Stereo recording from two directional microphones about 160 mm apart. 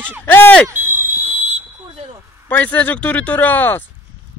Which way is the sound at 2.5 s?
10° left (ahead or behind).